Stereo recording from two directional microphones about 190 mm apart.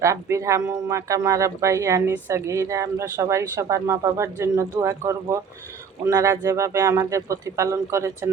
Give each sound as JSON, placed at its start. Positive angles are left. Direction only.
{"t": 0.0, "sound": "speech", "side_deg": -15}